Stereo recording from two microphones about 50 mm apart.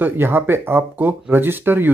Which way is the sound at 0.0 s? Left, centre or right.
Right.